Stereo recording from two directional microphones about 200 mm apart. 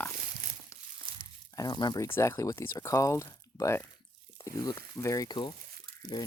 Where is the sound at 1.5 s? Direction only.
20° left (ahead or behind).